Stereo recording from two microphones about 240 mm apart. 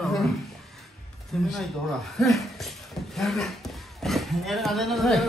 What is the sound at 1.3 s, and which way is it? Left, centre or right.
Speech, centre.